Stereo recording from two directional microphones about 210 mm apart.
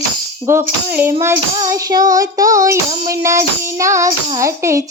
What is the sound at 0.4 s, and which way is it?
Music, 10° right (ahead or behind).